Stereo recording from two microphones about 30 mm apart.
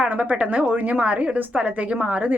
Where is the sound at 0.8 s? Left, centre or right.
Right.